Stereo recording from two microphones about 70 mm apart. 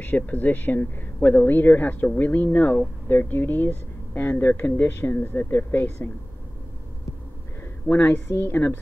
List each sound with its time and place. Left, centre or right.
0.0 s speech: left
7.9 s speech: left